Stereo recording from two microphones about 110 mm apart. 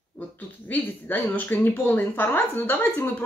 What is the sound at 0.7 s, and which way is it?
Speech, 15° left (ahead or behind).